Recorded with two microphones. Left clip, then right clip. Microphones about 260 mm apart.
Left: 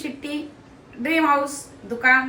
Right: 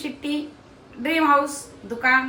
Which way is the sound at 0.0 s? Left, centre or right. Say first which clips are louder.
Right 2 dB; centre.